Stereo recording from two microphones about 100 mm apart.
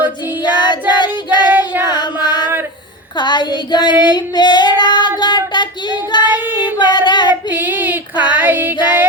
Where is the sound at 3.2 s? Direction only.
50° left (ahead or behind).